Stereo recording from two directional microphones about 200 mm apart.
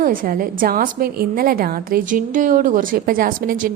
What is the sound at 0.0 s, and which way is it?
A woman's voice, 45° right (ahead or behind).